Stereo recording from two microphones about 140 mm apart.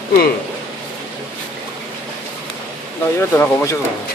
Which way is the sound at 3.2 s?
15° left (ahead or behind).